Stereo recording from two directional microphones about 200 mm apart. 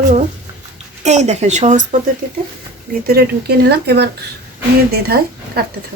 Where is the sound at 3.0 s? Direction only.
50° right (ahead or behind).